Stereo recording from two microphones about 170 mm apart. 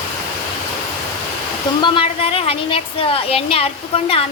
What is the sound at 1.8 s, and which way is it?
A woman's voice, 30° left (ahead or behind).